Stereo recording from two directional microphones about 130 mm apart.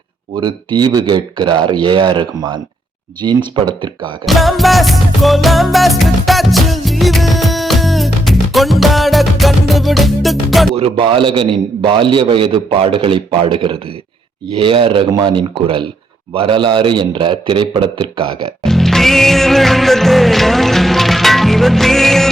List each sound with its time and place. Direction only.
0.3 s a man's voice: 35° right (ahead or behind)
4.3 s music: centre (ahead or behind)
10.8 s a man's voice: 45° right (ahead or behind)
18.6 s music: 5° left (ahead or behind)